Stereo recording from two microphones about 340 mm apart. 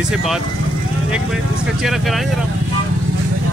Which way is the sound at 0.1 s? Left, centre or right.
Centre.